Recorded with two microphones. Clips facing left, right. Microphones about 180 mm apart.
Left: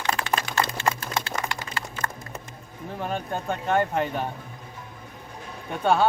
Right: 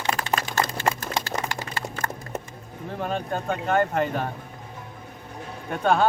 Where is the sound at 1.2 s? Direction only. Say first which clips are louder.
Right 1 dB; 40° right (ahead or behind).